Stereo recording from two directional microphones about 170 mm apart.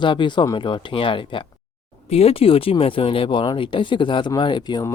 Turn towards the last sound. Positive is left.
turn(degrees=25)  # may be behind; listen again after turning